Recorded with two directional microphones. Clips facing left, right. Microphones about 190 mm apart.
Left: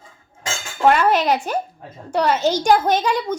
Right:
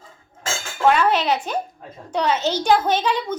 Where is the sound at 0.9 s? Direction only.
10° left (ahead or behind).